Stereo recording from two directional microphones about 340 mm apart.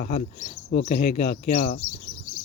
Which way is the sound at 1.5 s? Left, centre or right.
Left.